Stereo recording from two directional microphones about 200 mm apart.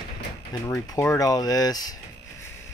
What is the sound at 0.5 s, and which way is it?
Speech, 15° left (ahead or behind).